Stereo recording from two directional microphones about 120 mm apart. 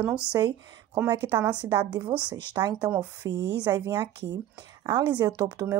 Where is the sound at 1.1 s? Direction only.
25° right (ahead or behind).